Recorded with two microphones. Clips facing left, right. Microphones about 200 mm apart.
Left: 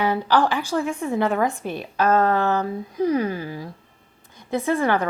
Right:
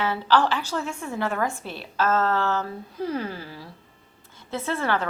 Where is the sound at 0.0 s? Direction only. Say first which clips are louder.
Left 2 dB; 15° left (ahead or behind).